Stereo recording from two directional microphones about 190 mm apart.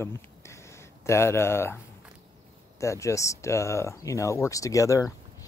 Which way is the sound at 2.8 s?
15° left (ahead or behind).